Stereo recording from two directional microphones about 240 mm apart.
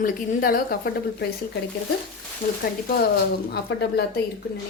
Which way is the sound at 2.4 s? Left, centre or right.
Left.